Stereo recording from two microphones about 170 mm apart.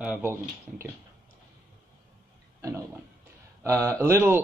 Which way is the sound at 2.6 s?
20° right (ahead or behind).